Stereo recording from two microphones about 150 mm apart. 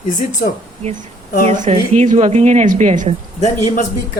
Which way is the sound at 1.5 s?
55° right (ahead or behind).